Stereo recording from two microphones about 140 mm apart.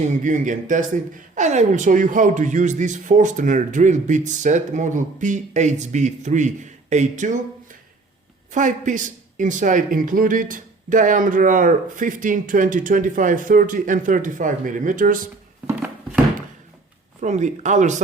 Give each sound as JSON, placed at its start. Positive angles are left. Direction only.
{"t": 0.0, "sound": "a man's voice", "side_deg": -65}
{"t": 8.5, "sound": "speech", "side_deg": -65}
{"t": 15.6, "sound": "a sound", "side_deg": -10}
{"t": 17.2, "sound": "a man's voice", "side_deg": -60}